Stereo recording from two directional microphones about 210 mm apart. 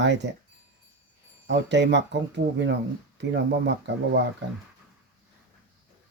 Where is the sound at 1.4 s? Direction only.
55° right (ahead or behind).